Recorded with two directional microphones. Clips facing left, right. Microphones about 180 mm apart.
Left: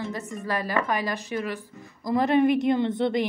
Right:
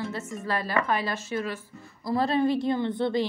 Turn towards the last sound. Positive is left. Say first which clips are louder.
# left 2 dB
turn(degrees=20)  # may be behind; listen again after turning